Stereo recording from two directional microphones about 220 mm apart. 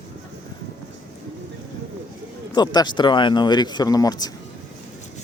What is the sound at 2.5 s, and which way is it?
Speech, 20° left (ahead or behind).